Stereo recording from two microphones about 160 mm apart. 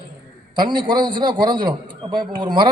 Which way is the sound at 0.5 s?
30° right (ahead or behind).